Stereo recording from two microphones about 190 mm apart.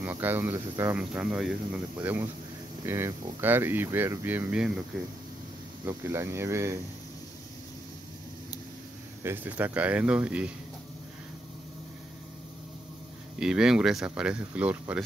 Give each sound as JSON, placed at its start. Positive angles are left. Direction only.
{"t": 0.0, "sound": "speech", "side_deg": -10}
{"t": 5.9, "sound": "speech", "side_deg": -15}
{"t": 9.2, "sound": "speech", "side_deg": -10}
{"t": 13.4, "sound": "speech", "side_deg": -5}